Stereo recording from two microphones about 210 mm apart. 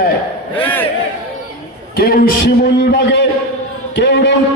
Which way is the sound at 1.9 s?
45° left (ahead or behind).